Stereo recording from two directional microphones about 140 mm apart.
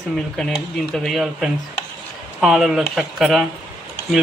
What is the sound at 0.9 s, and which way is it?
Speech, centre (ahead or behind).